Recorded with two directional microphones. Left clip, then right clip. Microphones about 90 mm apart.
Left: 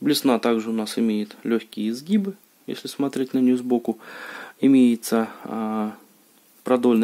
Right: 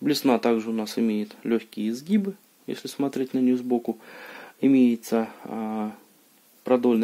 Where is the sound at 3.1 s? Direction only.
30° left (ahead or behind).